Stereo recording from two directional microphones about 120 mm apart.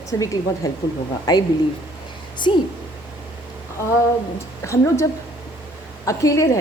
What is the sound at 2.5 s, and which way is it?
Speech, 45° left (ahead or behind).